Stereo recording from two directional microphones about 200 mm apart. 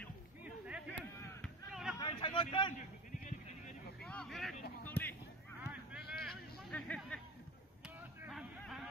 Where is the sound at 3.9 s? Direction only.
5° left (ahead or behind).